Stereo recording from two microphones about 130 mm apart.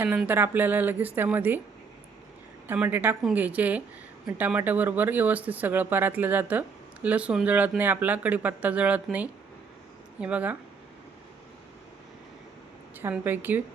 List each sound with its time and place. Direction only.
0.3 s speech: 15° right (ahead or behind)
2.6 s speech: 15° right (ahead or behind)
13.0 s speech: 15° right (ahead or behind)